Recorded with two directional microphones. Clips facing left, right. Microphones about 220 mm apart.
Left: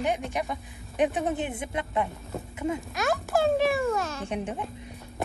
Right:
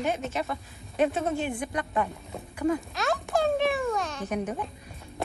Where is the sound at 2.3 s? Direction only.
Centre (ahead or behind).